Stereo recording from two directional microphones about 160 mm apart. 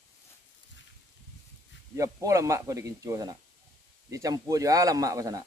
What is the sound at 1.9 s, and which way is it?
Speech, 20° right (ahead or behind).